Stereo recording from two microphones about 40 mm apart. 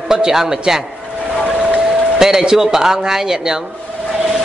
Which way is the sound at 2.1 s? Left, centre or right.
Centre.